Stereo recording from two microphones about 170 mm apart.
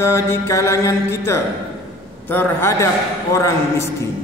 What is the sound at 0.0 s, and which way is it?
A man's voice, 15° left (ahead or behind).